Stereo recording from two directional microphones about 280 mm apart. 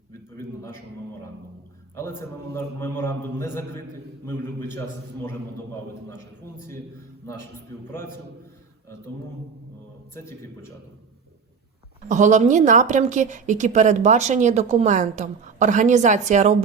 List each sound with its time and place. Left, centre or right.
0.1 s a sound: centre
2.0 s a man's voice: centre
7.9 s a man's voice: centre
10.2 s a man's voice: centre
12.0 s a woman's voice: right